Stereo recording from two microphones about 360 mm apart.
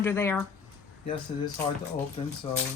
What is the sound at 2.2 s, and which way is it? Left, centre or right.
Speech, centre.